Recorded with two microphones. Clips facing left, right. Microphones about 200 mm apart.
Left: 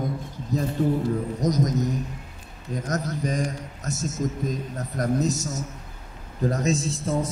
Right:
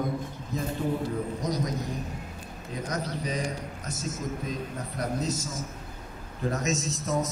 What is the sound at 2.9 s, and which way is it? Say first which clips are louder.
A man's voice: left 5 dB; 45° left (ahead or behind).